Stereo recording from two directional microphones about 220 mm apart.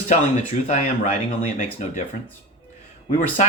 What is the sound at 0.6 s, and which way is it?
Speech, 30° left (ahead or behind).